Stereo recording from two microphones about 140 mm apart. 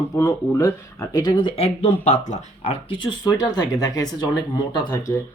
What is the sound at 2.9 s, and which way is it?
Speech, 30° left (ahead or behind).